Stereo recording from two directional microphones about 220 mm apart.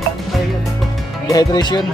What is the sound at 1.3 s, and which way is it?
Speech, 20° left (ahead or behind).